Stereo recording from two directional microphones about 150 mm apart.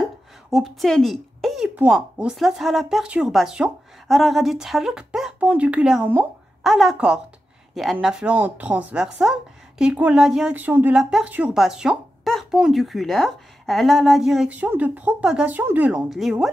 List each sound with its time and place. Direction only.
0.5 s a woman's voice: centre (ahead or behind)